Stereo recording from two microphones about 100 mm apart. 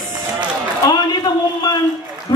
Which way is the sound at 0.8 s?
45° left (ahead or behind).